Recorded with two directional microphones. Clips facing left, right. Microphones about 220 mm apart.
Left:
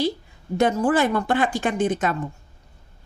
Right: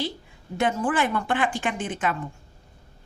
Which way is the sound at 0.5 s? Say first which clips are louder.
Left 5 dB; 40° left (ahead or behind).